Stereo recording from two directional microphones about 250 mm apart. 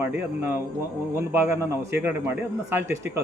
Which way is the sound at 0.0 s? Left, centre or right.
Centre.